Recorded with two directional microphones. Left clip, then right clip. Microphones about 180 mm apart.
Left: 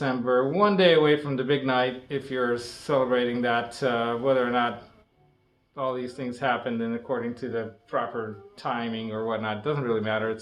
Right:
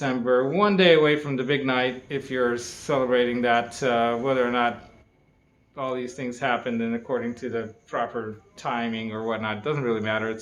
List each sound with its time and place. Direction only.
0.0 s speech: 20° right (ahead or behind)
5.7 s speech: 20° right (ahead or behind)